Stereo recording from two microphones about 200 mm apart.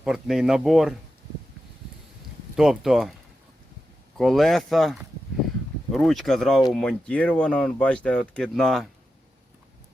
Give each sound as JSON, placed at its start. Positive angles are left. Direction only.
{"t": 0.0, "sound": "speech", "side_deg": 0}
{"t": 2.6, "sound": "speech", "side_deg": 0}
{"t": 4.2, "sound": "speech", "side_deg": 0}